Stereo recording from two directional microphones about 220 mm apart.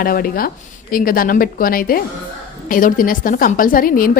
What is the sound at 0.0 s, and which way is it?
A woman's voice, 40° left (ahead or behind).